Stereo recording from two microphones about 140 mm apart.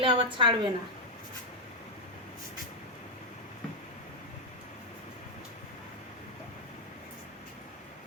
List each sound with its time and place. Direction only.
0.0 s a woman's voice: 35° right (ahead or behind)